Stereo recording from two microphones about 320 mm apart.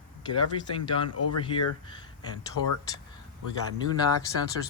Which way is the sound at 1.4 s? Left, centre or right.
Centre.